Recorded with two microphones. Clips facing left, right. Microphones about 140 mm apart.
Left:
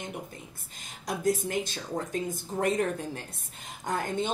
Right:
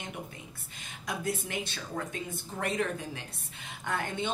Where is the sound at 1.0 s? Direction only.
40° left (ahead or behind).